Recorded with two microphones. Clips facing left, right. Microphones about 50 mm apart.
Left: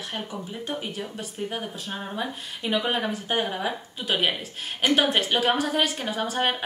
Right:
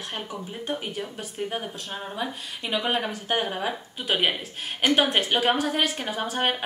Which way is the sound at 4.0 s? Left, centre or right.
Centre.